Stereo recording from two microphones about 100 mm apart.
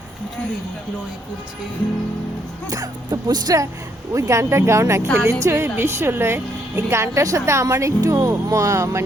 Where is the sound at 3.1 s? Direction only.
40° right (ahead or behind).